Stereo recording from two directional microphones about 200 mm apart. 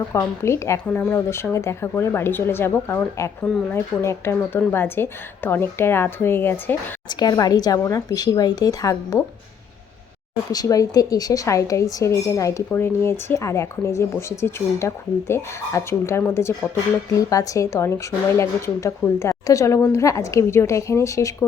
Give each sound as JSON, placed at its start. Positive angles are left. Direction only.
{"t": 0.1, "sound": "a woman's voice", "side_deg": 15}
{"t": 10.5, "sound": "a woman's voice", "side_deg": 20}